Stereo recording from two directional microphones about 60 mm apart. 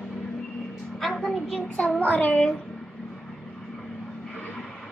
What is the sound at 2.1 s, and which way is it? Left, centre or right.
Speech, left.